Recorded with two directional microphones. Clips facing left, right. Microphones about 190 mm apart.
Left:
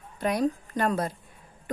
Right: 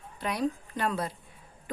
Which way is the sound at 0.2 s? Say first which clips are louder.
Left 4 dB; 45° left (ahead or behind).